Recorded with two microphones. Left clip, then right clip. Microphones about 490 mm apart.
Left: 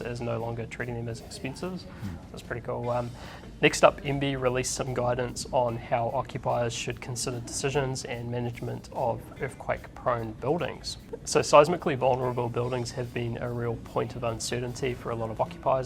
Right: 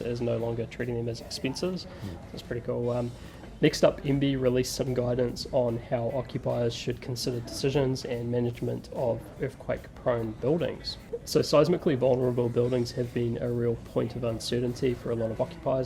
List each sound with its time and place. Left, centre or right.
0.0 s speech: left
2.5 s speech: left